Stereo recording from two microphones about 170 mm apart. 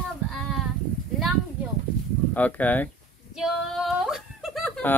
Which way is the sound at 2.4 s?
10° left (ahead or behind).